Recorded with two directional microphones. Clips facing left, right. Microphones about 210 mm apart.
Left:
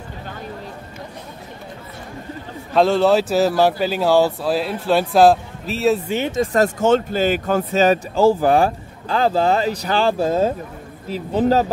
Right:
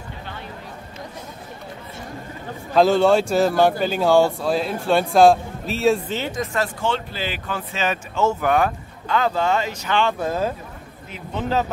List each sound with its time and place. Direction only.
2.7 s speech: centre (ahead or behind); by 6.4 s 15° left (ahead or behind)
6.4 s speech: 40° left (ahead or behind)